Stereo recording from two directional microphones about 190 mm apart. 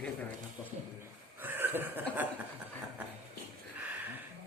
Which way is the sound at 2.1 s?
10° right (ahead or behind).